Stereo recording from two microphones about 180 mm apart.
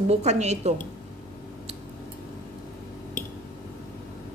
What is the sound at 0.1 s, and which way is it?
Speech, 40° right (ahead or behind).